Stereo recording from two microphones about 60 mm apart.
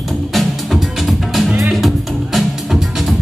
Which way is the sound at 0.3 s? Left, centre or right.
Centre.